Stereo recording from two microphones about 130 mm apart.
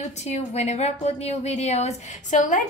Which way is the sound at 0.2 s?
55° left (ahead or behind).